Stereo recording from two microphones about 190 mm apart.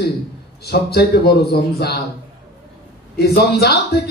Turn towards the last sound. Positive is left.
turn(degrees=60)  # may be behind; listen again after turning